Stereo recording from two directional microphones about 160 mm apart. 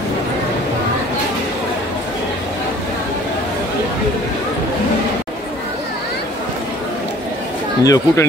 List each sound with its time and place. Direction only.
7.8 s speech: 20° left (ahead or behind)